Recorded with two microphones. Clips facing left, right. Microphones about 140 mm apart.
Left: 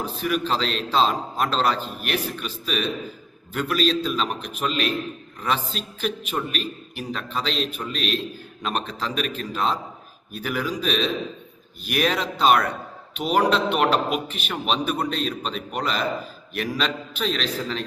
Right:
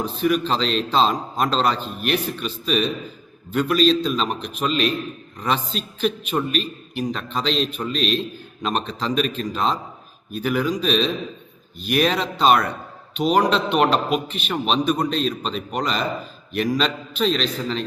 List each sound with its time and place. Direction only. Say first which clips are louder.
0.0 s a man's voice: right 4 dB; 10° left (ahead or behind)